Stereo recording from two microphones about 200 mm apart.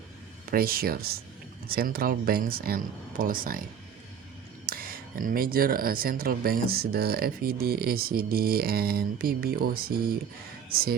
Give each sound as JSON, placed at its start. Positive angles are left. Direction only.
{"t": 0.5, "sound": "speech", "side_deg": -45}
{"t": 4.6, "sound": "speech", "side_deg": -45}